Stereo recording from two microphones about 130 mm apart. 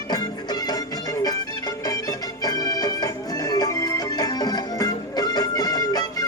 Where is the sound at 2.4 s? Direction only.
30° left (ahead or behind).